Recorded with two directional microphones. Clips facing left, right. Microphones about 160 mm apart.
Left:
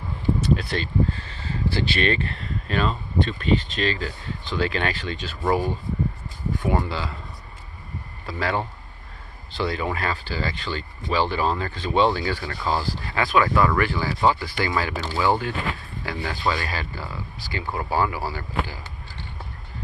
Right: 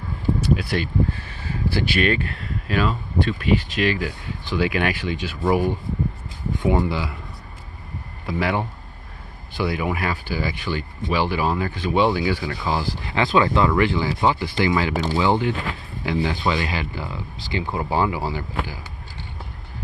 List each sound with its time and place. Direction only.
0.5 s speech: 10° right (ahead or behind)
8.3 s speech: 15° right (ahead or behind)